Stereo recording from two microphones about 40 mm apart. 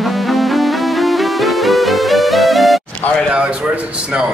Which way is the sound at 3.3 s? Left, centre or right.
Right.